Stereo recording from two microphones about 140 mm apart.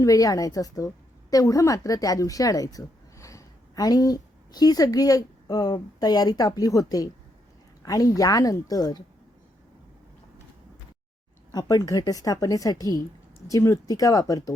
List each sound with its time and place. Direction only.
0.0 s a woman's voice: 25° left (ahead or behind)
11.5 s a woman's voice: 25° left (ahead or behind)